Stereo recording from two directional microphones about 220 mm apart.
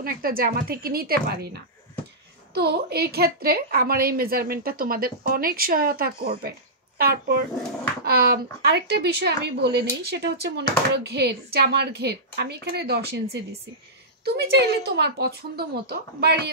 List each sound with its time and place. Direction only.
0.0 s a woman's voice: 40° right (ahead or behind)